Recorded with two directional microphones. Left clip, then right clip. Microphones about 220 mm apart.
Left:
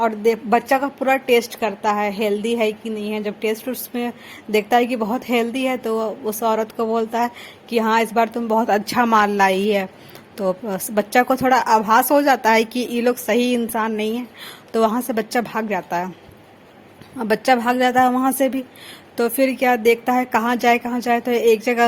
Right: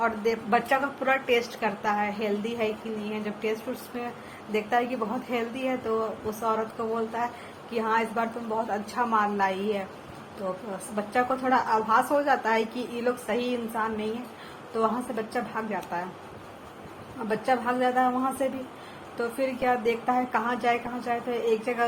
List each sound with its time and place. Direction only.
0.0 s a woman's voice: 45° left (ahead or behind)
10.9 s a woman's voice: 50° left (ahead or behind)
17.2 s a woman's voice: 50° left (ahead or behind)